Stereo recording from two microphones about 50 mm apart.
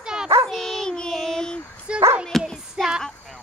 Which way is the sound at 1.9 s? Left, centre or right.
Right.